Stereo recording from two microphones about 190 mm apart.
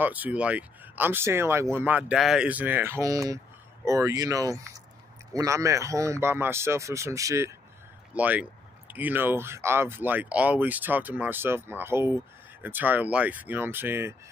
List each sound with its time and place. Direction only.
0.0 s speech: 10° right (ahead or behind)